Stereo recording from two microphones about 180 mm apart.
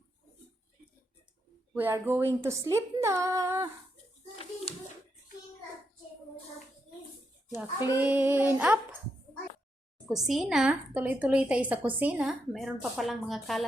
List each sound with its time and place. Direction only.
1.7 s a woman's voice: 10° right (ahead or behind)
4.7 s hands: 30° left (ahead or behind)
7.5 s a woman's voice: 15° right (ahead or behind)
10.1 s a woman's voice: centre (ahead or behind)